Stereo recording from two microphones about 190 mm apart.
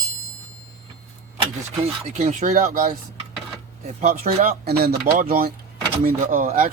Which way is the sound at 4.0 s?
50° right (ahead or behind).